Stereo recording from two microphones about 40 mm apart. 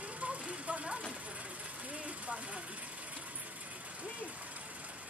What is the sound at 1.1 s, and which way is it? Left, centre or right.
Vehicle, right.